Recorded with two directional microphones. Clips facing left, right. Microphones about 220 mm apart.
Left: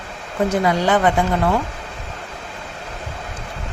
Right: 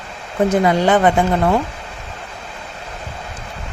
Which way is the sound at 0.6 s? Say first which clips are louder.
Right 2 dB; 25° right (ahead or behind).